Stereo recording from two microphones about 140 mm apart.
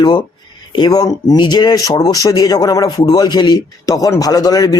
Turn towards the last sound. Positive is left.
turn(degrees=25)  # may be behind; listen again after turning